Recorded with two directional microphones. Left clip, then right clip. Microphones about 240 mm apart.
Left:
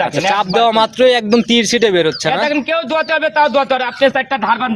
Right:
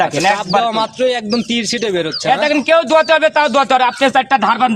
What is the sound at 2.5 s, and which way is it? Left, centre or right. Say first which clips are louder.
A man's voice: right 5 dB; right.